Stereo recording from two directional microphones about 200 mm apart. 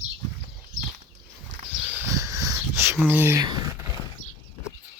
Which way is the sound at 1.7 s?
10° right (ahead or behind).